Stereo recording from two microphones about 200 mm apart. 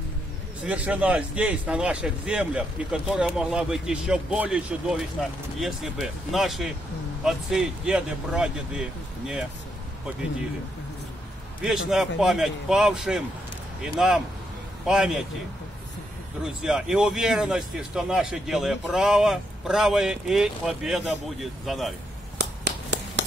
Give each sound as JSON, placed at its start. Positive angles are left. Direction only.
{"t": 0.7, "sound": "speech", "side_deg": -5}
{"t": 11.6, "sound": "speech", "side_deg": -5}
{"t": 16.4, "sound": "speech", "side_deg": -5}
{"t": 22.4, "sound": "a sound", "side_deg": -60}